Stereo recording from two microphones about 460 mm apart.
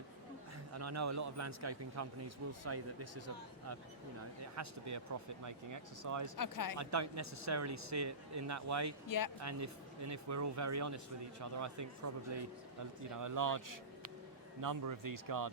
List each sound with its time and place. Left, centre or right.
0.7 s a man's voice: right
6.3 s speech: left
6.7 s a man's voice: right
9.0 s speech: left
9.4 s a man's voice: right
13.1 s a man's voice: right